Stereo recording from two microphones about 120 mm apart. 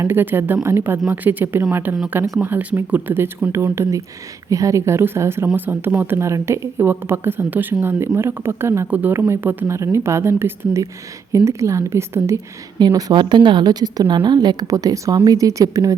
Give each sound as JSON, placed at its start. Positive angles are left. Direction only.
{"t": 0.0, "sound": "a woman's voice", "side_deg": -20}